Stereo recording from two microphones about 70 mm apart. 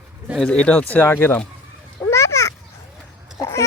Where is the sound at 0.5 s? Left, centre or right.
Centre.